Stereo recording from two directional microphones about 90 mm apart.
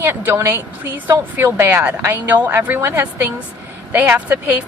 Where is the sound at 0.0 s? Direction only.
20° right (ahead or behind).